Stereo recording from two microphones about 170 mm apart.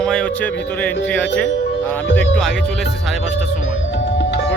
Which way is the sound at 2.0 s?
90° left.